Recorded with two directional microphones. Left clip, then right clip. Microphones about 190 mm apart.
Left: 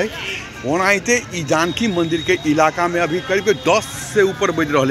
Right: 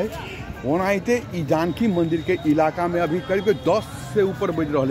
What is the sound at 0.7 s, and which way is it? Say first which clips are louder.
Speech: left 5 dB; 15° right (ahead or behind).